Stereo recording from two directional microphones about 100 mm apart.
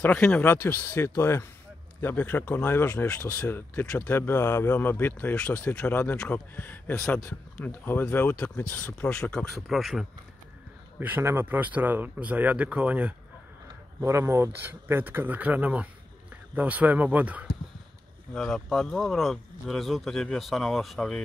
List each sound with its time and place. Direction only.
0.0 s speech: 10° left (ahead or behind)
11.0 s speech: 20° right (ahead or behind)
14.0 s speech: 25° right (ahead or behind)
18.3 s speech: 5° left (ahead or behind)